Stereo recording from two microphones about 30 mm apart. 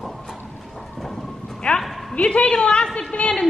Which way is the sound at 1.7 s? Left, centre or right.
Left.